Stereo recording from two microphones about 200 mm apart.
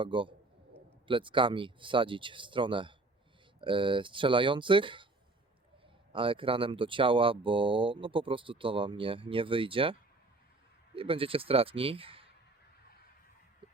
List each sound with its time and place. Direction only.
0.0 s speech: 25° right (ahead or behind)
6.1 s speech: 25° right (ahead or behind)